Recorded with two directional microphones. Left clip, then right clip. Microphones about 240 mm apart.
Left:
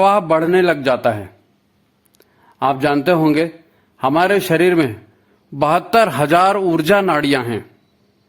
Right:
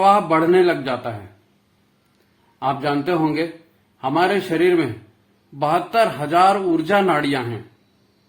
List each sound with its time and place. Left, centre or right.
0.0 s a man's voice: left
2.6 s a man's voice: left